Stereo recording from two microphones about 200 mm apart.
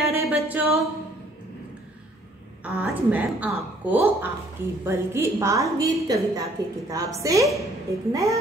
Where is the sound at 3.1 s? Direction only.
10° right (ahead or behind).